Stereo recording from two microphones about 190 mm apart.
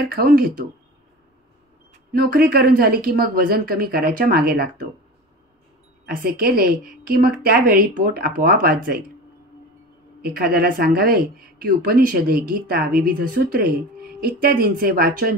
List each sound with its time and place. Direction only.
0.0 s speech: 50° right (ahead or behind)
2.1 s speech: 50° right (ahead or behind)
6.0 s speech: 50° right (ahead or behind)
10.2 s speech: 50° right (ahead or behind)